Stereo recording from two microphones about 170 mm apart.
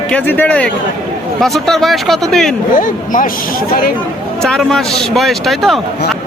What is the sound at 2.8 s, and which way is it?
Speech, 50° left (ahead or behind).